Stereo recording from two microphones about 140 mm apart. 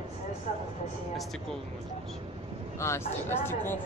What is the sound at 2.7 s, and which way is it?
A man's voice, 20° left (ahead or behind).